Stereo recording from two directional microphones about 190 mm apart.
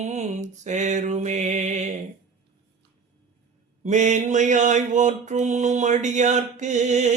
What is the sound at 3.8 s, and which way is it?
Mantra, 40° right (ahead or behind).